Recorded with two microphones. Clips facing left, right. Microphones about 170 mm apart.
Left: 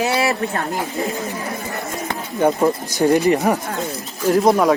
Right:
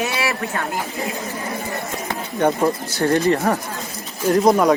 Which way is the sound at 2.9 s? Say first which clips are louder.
Left 3 dB; 15° left (ahead or behind).